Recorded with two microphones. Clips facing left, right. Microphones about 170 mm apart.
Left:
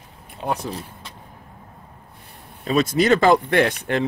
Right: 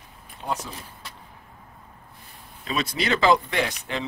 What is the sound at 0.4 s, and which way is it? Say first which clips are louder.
Speech: left 4 dB; 65° left (ahead or behind).